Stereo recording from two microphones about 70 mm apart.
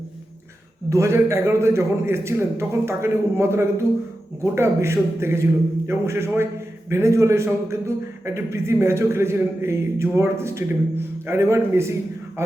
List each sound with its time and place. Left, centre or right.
0.9 s a man's voice: right